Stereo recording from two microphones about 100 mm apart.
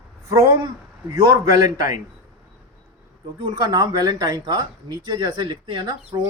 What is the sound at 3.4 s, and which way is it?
Speech, 40° right (ahead or behind).